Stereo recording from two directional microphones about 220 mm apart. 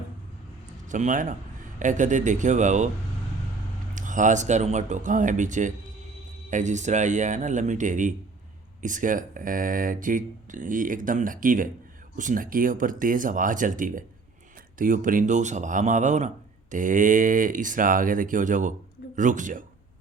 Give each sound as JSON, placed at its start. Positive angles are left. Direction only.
{"t": 0.9, "sound": "speech", "side_deg": -35}
{"t": 3.9, "sound": "speech", "side_deg": -35}